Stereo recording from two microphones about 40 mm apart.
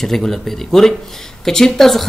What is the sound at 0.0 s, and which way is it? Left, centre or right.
Speech, centre.